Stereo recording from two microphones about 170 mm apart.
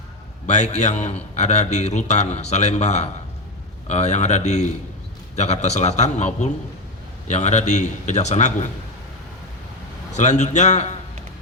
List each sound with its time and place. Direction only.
0.4 s a man's voice: 40° left (ahead or behind)
10.2 s a man's voice: 45° left (ahead or behind)